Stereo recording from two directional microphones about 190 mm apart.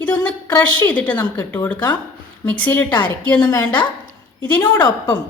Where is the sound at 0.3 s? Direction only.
10° left (ahead or behind).